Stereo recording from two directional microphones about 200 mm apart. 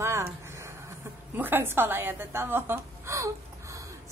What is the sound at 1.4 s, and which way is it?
A woman's voice, 10° right (ahead or behind).